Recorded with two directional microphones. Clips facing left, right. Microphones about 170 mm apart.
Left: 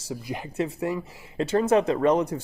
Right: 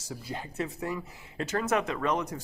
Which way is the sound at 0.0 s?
20° left (ahead or behind).